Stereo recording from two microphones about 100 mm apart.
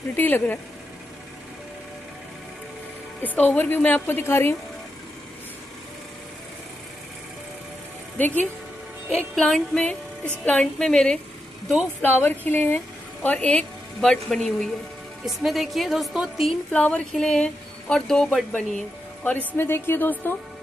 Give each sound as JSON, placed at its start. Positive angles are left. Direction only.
{"t": 0.1, "sound": "a woman's voice", "side_deg": 20}
{"t": 3.2, "sound": "speech", "side_deg": 15}
{"t": 8.2, "sound": "speech", "side_deg": 15}
{"t": 9.3, "sound": "speech", "side_deg": 5}
{"t": 12.0, "sound": "a woman's voice", "side_deg": 20}
{"t": 16.7, "sound": "speech", "side_deg": 15}
{"t": 19.5, "sound": "a woman's voice", "side_deg": 20}